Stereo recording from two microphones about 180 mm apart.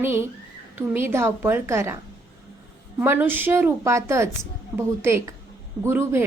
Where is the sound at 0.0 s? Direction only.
10° right (ahead or behind).